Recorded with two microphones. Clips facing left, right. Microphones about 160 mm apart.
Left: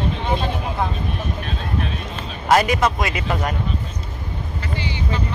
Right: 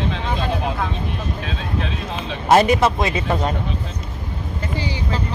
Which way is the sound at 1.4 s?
90° right.